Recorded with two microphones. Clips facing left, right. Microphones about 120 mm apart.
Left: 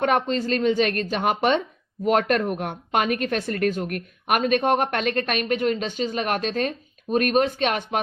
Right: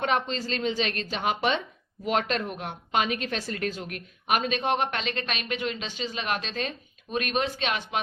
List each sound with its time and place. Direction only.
0.0 s speech: 50° left (ahead or behind)